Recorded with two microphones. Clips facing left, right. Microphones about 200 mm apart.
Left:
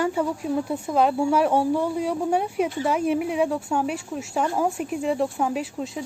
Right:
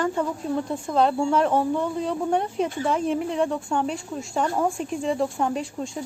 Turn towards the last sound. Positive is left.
turn(degrees=5)  # may be behind; listen again after turning